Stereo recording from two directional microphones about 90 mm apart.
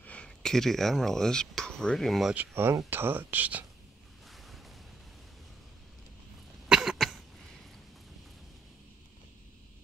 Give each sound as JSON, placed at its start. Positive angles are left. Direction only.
{"t": 0.0, "sound": "speech", "side_deg": 15}
{"t": 2.3, "sound": "speech", "side_deg": -25}
{"t": 4.3, "sound": "a sound", "side_deg": 0}
{"t": 6.7, "sound": "cough", "side_deg": -5}